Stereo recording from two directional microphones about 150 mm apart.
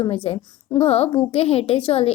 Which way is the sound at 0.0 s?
40° left (ahead or behind).